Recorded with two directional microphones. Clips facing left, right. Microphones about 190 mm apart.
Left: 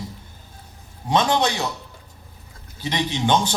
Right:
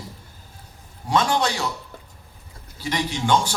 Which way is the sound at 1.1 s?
20° left (ahead or behind).